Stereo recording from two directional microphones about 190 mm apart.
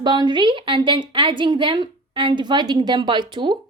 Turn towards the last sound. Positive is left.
turn(degrees=-25)  # may be behind; listen again after turning